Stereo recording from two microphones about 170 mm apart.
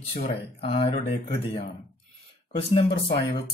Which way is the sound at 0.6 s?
35° left (ahead or behind).